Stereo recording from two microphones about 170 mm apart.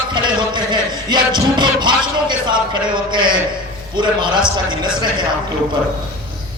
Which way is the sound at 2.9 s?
25° right (ahead or behind).